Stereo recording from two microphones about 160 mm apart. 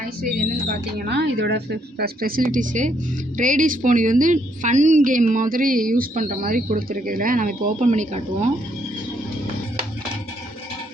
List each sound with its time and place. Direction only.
0.2 s a woman's voice: 65° right (ahead or behind); by 8.4 s 45° right (ahead or behind)